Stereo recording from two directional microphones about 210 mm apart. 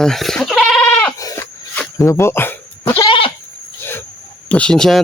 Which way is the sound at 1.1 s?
15° left (ahead or behind).